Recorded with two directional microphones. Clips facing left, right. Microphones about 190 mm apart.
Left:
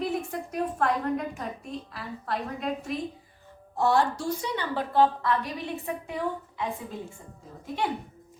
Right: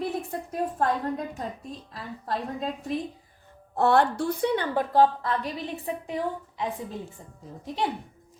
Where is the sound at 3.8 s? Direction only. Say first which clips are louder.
Right 3 dB; 60° right (ahead or behind); by 5.3 s 45° right (ahead or behind).